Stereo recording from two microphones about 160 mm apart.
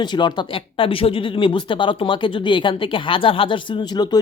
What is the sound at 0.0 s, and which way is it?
Speech, 25° left (ahead or behind).